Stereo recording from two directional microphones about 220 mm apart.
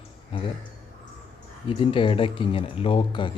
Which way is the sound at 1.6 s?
25° left (ahead or behind).